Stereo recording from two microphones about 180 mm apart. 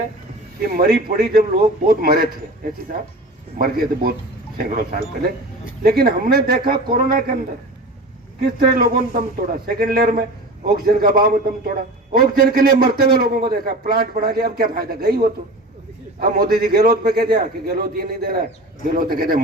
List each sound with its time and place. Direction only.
0.6 s a man's voice: 55° right (ahead or behind)
3.6 s a man's voice: 55° right (ahead or behind)
8.4 s a man's voice: 55° right (ahead or behind)
16.2 s a man's voice: 55° right (ahead or behind)